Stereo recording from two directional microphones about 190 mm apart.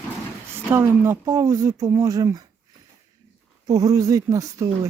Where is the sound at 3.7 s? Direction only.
20° right (ahead or behind).